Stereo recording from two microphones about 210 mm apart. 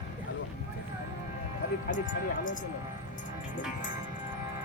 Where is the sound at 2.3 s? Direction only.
40° left (ahead or behind).